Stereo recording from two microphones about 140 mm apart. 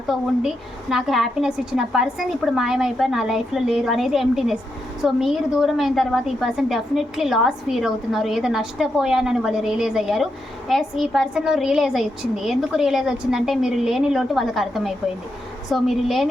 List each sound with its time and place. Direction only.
0.1 s a woman's voice: centre (ahead or behind)